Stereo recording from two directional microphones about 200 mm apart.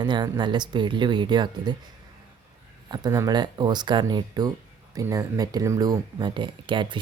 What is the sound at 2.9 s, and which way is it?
Speech, 20° right (ahead or behind).